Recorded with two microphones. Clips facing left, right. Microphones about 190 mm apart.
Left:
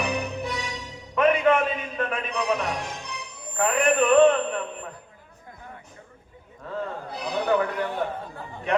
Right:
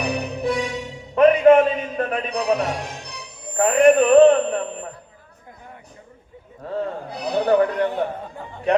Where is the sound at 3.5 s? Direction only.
35° right (ahead or behind).